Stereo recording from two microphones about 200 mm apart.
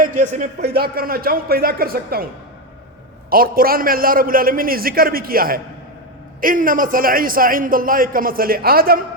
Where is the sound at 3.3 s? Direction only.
45° right (ahead or behind).